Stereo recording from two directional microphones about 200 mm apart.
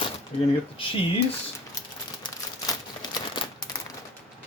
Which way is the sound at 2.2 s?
20° left (ahead or behind).